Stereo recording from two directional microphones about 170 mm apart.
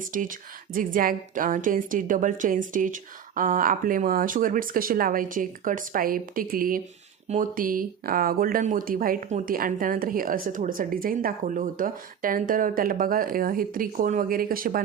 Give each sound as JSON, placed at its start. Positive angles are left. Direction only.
{"t": 0.0, "sound": "a woman's voice", "side_deg": -50}